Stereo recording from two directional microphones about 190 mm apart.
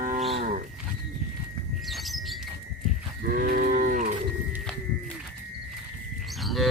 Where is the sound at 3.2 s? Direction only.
50° right (ahead or behind).